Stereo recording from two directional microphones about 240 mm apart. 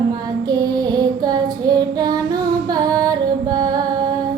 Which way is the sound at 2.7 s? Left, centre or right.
Centre.